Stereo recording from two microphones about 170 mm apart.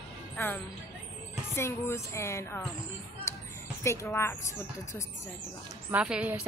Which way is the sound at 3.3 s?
15° left (ahead or behind).